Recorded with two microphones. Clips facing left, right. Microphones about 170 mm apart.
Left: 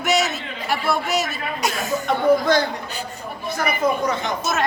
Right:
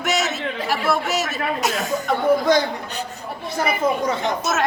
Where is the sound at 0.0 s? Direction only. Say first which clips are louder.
Left 2 dB; centre (ahead or behind).